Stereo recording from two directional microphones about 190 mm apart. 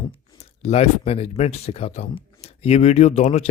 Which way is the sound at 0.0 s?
25° left (ahead or behind).